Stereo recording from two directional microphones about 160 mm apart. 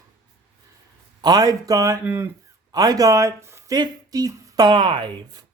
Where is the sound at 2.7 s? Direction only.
25° right (ahead or behind).